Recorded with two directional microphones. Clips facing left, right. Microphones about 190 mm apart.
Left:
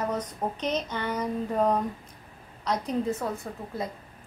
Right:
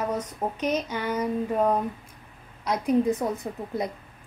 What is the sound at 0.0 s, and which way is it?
A woman's voice, 10° right (ahead or behind).